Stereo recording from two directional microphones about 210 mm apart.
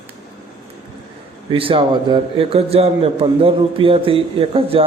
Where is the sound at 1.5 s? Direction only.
25° right (ahead or behind).